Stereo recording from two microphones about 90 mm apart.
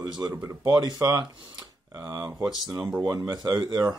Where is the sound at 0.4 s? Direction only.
45° right (ahead or behind).